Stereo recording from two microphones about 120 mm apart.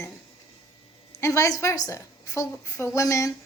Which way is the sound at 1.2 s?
25° left (ahead or behind).